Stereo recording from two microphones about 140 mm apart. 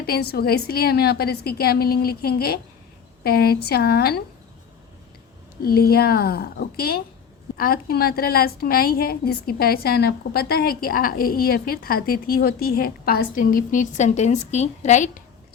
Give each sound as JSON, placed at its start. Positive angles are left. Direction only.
{"t": 0.0, "sound": "a woman's voice", "side_deg": 90}
{"t": 5.6, "sound": "a woman's voice", "side_deg": 90}